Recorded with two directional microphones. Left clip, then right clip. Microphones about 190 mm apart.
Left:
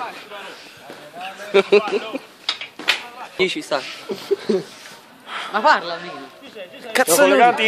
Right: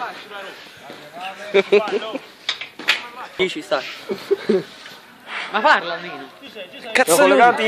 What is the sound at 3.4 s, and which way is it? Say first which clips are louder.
Speech: right 1 dB; 40° left (ahead or behind).